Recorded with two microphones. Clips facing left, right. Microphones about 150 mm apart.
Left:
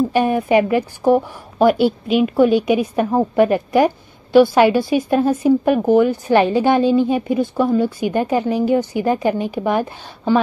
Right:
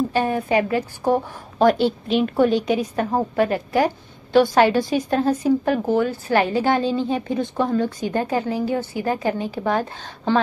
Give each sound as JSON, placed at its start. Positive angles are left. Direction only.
{"t": 0.1, "sound": "a woman's voice", "side_deg": 15}